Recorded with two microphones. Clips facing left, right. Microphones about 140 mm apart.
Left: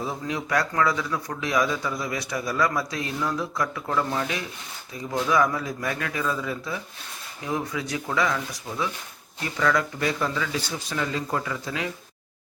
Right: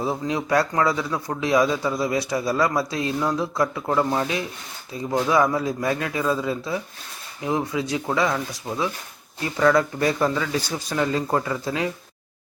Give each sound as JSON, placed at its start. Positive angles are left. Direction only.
{"t": 0.0, "sound": "speech", "side_deg": -30}
{"t": 9.6, "sound": "speech", "side_deg": -35}